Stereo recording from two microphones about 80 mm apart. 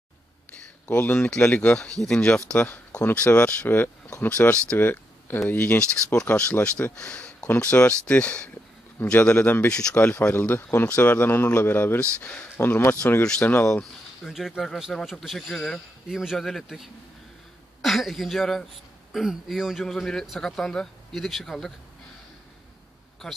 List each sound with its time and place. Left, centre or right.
0.6 s speech: centre
3.0 s speech: left
4.7 s a sound: left
5.5 s speech: centre
12.5 s speech: left
13.4 s speech: left
14.2 s speech: centre